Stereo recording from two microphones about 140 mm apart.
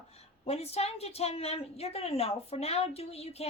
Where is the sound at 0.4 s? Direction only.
45° left (ahead or behind).